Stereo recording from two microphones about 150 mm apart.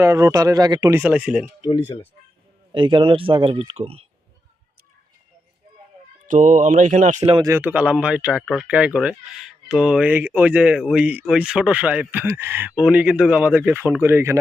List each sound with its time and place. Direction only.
0.0 s speech: 20° right (ahead or behind)
0.9 s speech: 10° right (ahead or behind)
2.7 s speech: 35° right (ahead or behind)
6.2 s speech: 55° right (ahead or behind)
7.4 s speech: 15° right (ahead or behind)